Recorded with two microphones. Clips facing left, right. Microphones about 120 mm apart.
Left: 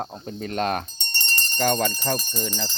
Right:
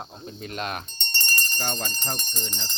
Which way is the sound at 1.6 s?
65° left (ahead or behind).